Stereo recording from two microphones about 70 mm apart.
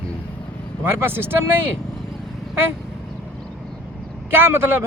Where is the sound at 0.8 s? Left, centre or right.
Right.